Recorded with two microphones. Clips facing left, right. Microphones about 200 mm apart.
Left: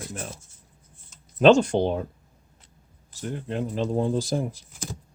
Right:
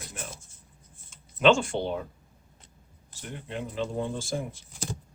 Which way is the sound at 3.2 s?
40° left (ahead or behind).